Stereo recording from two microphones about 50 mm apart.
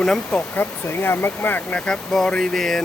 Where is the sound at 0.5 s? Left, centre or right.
Left.